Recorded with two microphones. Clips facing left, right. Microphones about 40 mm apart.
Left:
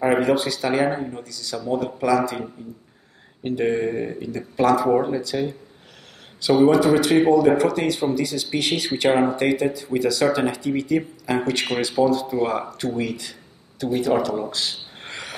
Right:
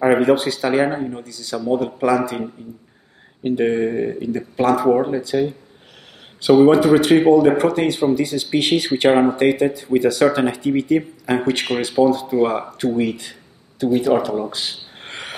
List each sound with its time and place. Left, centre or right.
0.2 s speech: right
0.8 s speech: centre
1.2 s speech: right
3.6 s speech: centre
4.2 s speech: right
4.9 s speech: centre
6.4 s speech: right
9.2 s speech: right
13.0 s a sound: right
14.5 s speech: right
15.0 s cricket: right